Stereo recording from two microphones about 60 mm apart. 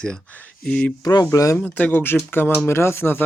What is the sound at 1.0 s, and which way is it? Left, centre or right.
Speech, left.